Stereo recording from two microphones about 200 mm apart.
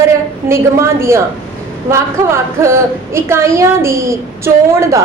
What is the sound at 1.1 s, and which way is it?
A woman's voice, 15° right (ahead or behind).